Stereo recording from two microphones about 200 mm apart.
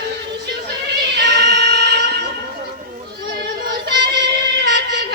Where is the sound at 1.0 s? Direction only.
55° right (ahead or behind).